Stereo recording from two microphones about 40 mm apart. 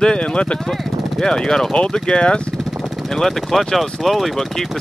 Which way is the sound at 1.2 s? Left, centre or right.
Centre.